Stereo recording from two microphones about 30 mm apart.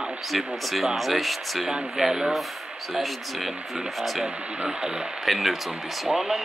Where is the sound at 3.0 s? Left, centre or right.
Centre.